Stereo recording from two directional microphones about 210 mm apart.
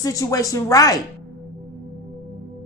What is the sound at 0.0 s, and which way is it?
Speech, 15° left (ahead or behind).